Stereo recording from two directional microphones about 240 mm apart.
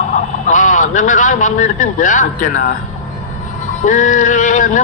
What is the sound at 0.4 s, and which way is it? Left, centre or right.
A man's voice, left.